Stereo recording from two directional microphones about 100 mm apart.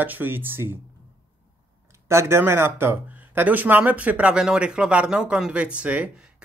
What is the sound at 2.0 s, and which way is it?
Speech, 25° right (ahead or behind).